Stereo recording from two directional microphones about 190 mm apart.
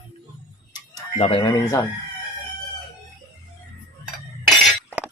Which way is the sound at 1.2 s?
30° left (ahead or behind).